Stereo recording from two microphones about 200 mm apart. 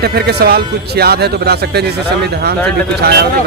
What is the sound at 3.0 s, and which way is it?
Speech, 50° right (ahead or behind).